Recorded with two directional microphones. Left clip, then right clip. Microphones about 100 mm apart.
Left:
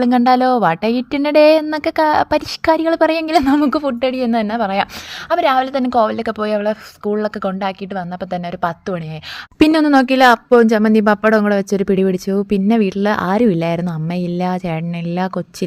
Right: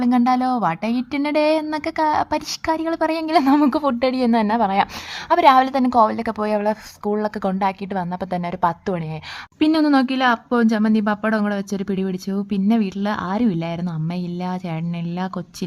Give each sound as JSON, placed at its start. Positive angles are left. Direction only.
{"t": 0.0, "sound": "speech", "side_deg": 30}
{"t": 3.5, "sound": "speech", "side_deg": 10}
{"t": 5.3, "sound": "speech", "side_deg": -5}
{"t": 5.7, "sound": "speech", "side_deg": 5}
{"t": 9.7, "sound": "a woman's voice", "side_deg": 50}